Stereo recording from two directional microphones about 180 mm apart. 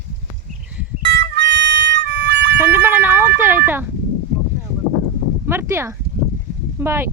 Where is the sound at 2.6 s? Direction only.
10° right (ahead or behind).